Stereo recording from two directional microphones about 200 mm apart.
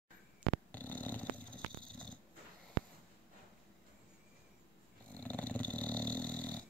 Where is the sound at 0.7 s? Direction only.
10° left (ahead or behind).